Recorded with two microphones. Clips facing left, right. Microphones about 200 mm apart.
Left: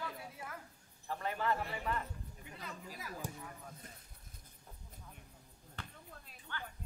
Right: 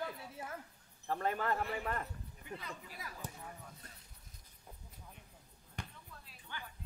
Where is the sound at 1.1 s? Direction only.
45° right (ahead or behind).